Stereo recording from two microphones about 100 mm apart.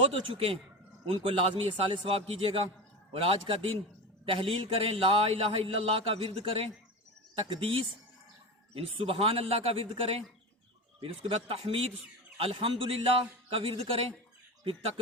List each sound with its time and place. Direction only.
0.1 s a man's voice: 65° right (ahead or behind)
1.9 s a man's voice: 80° right
7.3 s a man's voice: 60° right (ahead or behind); by 11.9 s 80° right
12.4 s a man's voice: 65° right (ahead or behind)